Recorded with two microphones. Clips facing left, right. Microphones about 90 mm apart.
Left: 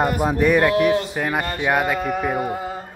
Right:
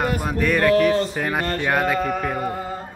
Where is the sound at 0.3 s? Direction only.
15° left (ahead or behind).